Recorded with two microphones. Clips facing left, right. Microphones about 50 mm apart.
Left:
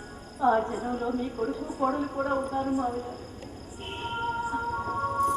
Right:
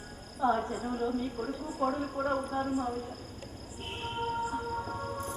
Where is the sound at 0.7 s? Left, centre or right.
Left.